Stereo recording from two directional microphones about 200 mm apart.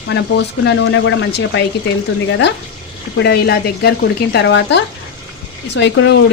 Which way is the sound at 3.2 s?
55° left (ahead or behind).